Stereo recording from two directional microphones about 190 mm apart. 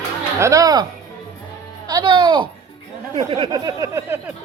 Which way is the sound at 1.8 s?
25° right (ahead or behind).